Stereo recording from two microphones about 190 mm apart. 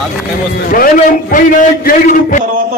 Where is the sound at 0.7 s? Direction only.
50° left (ahead or behind).